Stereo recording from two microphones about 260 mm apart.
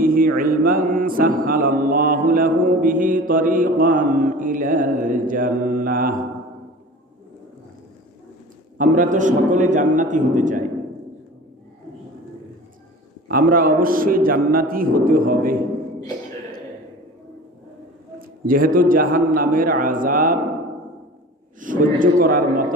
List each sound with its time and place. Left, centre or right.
0.0 s mantra: right
8.8 s a man's voice: right
13.2 s mantra: right
18.4 s mantra: right
21.6 s mantra: right